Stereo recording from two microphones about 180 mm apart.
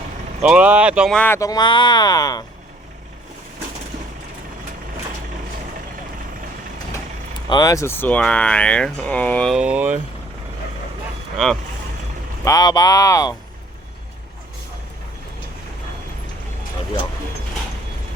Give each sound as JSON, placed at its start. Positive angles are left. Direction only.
{"t": 0.4, "sound": "speech", "side_deg": -5}
{"t": 1.1, "sound": "speech", "side_deg": 10}
{"t": 7.5, "sound": "speech", "side_deg": 20}
{"t": 9.6, "sound": "speech", "side_deg": -5}
{"t": 12.5, "sound": "speech", "side_deg": 20}